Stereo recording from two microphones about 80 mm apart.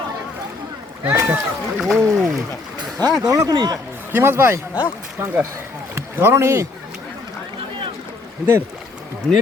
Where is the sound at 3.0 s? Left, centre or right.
Right.